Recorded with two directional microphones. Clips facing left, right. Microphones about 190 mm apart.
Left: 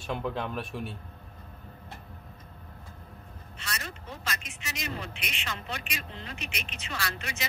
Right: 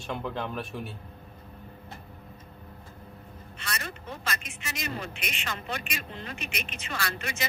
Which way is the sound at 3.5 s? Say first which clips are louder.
Right 2 dB; 55° right (ahead or behind).